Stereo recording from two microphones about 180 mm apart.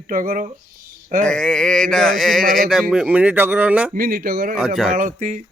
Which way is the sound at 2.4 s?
50° right (ahead or behind).